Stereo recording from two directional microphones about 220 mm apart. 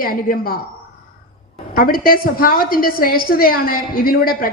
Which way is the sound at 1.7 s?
40° left (ahead or behind).